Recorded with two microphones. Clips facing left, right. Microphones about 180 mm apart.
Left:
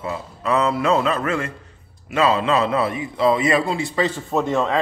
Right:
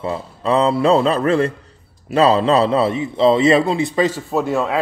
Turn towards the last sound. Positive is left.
turn(degrees=-5)  # may be behind; listen again after turning